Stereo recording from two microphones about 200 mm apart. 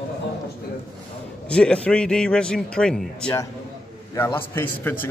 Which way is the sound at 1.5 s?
5° left (ahead or behind).